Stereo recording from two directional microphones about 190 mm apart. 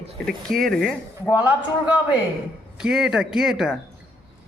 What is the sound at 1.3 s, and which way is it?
Speech, 10° right (ahead or behind).